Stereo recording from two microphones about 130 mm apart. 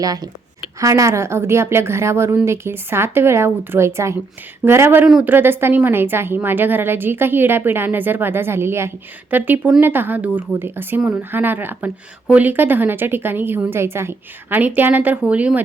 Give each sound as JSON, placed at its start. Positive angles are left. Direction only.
{"t": 0.0, "sound": "a woman's voice", "side_deg": -30}
{"t": 5.0, "sound": "speech", "side_deg": -5}
{"t": 5.3, "sound": "a woman's voice", "side_deg": -15}